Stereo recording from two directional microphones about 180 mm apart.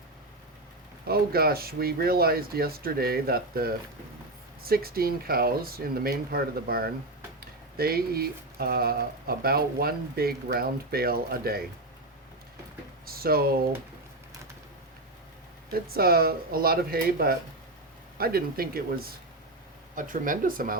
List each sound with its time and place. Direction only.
1.0 s speech: 60° right (ahead or behind)
13.1 s speech: 55° right (ahead or behind)
15.7 s speech: 55° right (ahead or behind)